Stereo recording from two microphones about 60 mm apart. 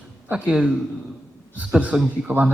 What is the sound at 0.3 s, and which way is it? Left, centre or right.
Speech, right.